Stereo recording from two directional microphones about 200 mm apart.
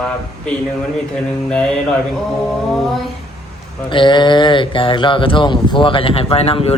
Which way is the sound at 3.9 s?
25° left (ahead or behind).